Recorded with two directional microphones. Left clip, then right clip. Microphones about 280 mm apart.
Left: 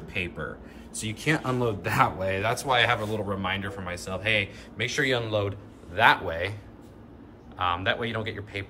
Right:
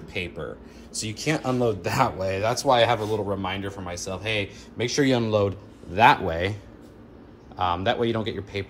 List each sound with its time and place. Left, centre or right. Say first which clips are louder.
0.1 s speech: even; centre; by 6.5 s right
7.5 s speech: right 2 dB; centre